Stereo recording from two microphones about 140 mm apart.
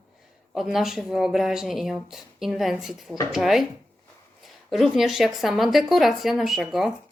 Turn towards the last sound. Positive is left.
turn(degrees=0)  # may be behind; listen again after turning